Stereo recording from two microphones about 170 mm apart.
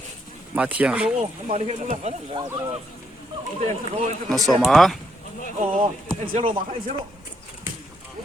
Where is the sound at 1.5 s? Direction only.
40° right (ahead or behind).